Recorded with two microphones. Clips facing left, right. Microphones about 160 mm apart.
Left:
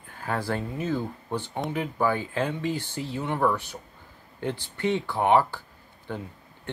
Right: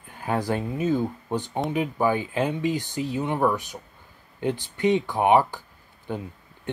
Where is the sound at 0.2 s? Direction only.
15° right (ahead or behind).